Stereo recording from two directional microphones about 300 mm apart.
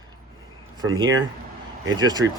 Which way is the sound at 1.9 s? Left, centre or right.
Centre.